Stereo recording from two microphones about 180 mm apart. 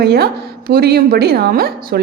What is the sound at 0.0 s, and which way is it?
Speech, 60° right (ahead or behind).